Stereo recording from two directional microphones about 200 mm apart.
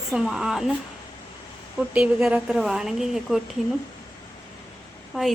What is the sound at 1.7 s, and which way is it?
Speech, 5° right (ahead or behind).